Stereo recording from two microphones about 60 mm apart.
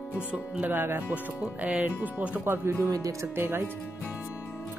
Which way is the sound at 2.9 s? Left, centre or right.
Right.